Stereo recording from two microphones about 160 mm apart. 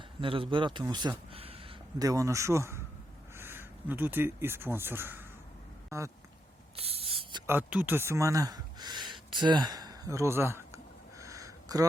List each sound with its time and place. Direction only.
0.2 s speech: 35° right (ahead or behind)
2.0 s speech: 20° right (ahead or behind)
6.7 s owl: 40° right (ahead or behind)
7.4 s speech: 10° right (ahead or behind)
11.2 s a sound: 20° right (ahead or behind)